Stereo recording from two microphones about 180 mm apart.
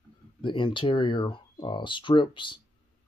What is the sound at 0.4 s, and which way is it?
Speech, 25° left (ahead or behind).